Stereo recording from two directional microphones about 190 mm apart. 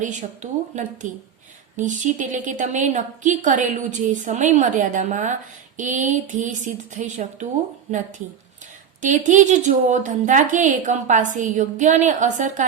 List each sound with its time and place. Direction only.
0.0 s a woman's voice: 40° right (ahead or behind)
9.0 s a woman's voice: 40° right (ahead or behind)